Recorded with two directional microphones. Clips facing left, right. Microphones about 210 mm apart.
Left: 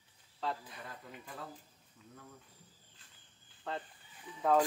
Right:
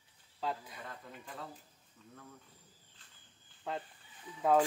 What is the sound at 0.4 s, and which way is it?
Speech, 10° right (ahead or behind).